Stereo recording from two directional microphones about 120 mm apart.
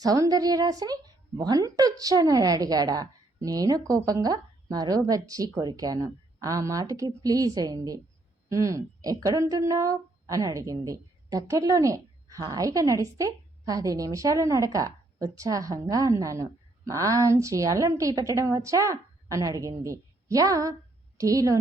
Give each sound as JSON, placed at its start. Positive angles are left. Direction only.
{"t": 0.0, "sound": "a woman's voice", "side_deg": -30}